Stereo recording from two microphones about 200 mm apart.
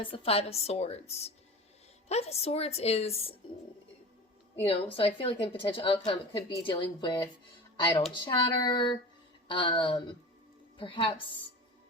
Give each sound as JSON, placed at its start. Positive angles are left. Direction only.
{"t": 0.0, "sound": "a woman's voice", "side_deg": 25}
{"t": 4.6, "sound": "speech", "side_deg": 25}